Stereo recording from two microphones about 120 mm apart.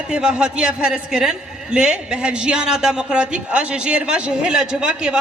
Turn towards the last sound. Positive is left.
turn(degrees=-5)  # may be behind; listen again after turning